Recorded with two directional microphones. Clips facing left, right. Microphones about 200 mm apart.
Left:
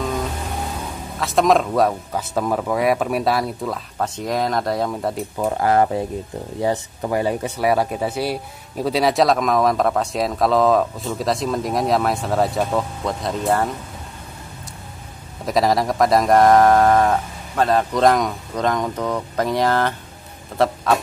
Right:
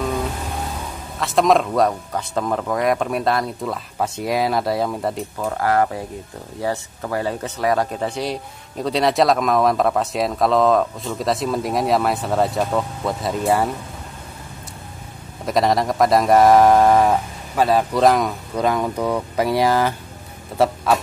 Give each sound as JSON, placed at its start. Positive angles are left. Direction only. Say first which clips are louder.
{"t": 1.2, "sound": "speech", "louder": "even", "side_deg": 0}
{"t": 5.4, "sound": "speech", "louder": "left 2 dB", "side_deg": 20}
{"t": 15.4, "sound": "speech", "louder": "even", "side_deg": 0}